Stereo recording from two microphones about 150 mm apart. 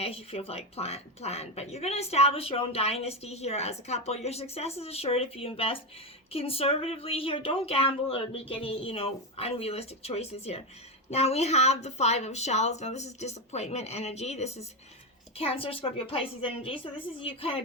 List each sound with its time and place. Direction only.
0.0 s a woman's voice: 40° left (ahead or behind)